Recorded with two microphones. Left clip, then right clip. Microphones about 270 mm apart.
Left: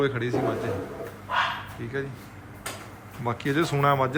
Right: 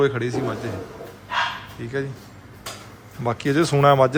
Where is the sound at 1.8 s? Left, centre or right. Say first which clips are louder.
Right 7 dB; centre.